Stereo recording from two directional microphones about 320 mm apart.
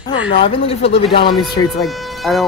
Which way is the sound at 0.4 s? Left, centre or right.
Centre.